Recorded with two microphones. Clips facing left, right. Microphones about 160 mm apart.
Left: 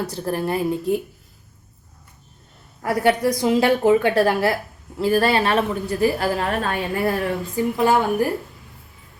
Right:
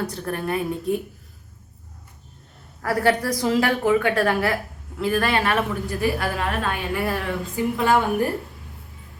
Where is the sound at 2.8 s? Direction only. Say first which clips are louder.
Left 2 dB; 20° left (ahead or behind); by 7.1 s 40° left (ahead or behind).